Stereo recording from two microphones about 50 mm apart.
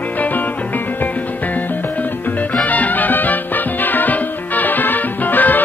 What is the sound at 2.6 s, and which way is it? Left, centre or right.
Music, left.